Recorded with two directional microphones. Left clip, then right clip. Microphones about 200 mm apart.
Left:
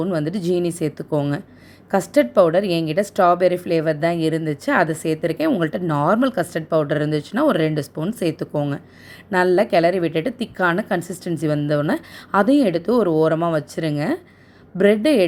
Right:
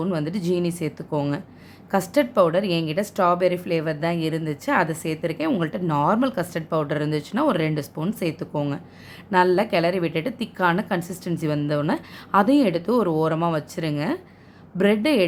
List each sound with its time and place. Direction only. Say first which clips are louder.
0.0 s a woman's voice: left 4 dB; 15° left (ahead or behind)